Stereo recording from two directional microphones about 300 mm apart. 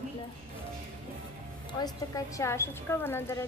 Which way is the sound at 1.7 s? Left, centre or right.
Centre.